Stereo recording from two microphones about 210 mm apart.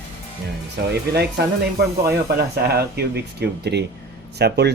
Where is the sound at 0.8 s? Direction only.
50° right (ahead or behind).